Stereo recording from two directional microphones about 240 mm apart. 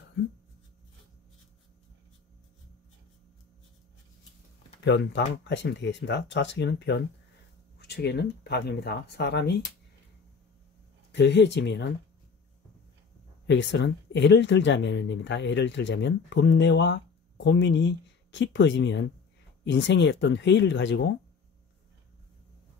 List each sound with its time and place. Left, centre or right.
4.8 s speech: left
11.1 s speech: left
13.5 s speech: left